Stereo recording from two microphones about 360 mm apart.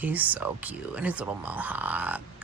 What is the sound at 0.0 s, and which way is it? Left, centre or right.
Speech, centre.